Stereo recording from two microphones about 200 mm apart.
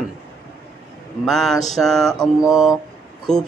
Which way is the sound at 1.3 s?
Centre (ahead or behind).